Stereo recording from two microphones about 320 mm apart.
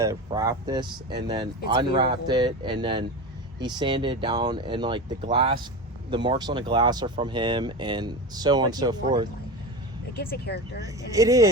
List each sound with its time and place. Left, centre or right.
0.0 s speech: centre
10.2 s speech: left
11.1 s speech: centre